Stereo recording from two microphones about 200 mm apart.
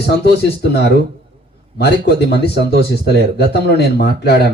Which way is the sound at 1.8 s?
55° left (ahead or behind).